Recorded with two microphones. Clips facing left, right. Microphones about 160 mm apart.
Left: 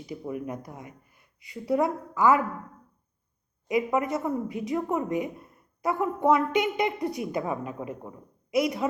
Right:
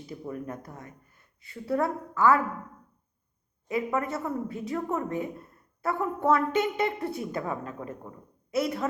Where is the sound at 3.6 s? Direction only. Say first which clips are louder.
Left 3 dB; 15° left (ahead or behind).